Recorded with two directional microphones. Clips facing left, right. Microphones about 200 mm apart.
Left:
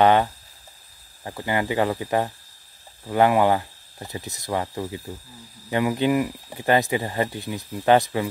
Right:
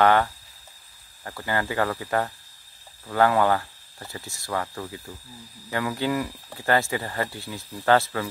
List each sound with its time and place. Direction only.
0.0 s speech: 20° left (ahead or behind)